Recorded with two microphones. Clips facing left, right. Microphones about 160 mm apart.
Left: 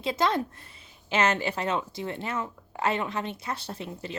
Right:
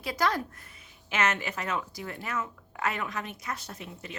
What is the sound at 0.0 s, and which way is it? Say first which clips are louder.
A woman's voice: left 3 dB; 25° left (ahead or behind).